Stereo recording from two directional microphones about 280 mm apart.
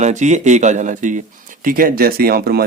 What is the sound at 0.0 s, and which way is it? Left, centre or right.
Speech, right.